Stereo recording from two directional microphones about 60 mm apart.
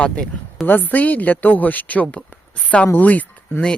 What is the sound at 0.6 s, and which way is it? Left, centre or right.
Speech, left.